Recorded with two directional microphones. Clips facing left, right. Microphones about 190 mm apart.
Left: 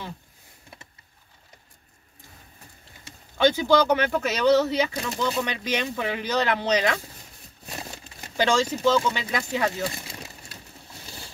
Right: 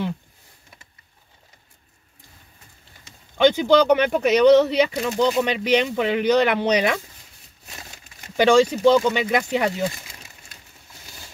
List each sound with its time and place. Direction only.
3.3 s speech: 15° right (ahead or behind)
8.4 s speech: 15° right (ahead or behind)